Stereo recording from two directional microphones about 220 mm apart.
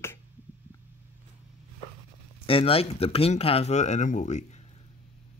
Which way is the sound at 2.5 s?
25° left (ahead or behind).